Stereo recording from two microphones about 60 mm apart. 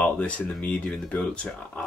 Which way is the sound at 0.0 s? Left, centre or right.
Centre.